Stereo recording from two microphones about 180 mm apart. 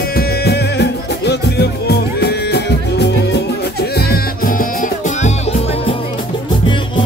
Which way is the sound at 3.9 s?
55° left (ahead or behind).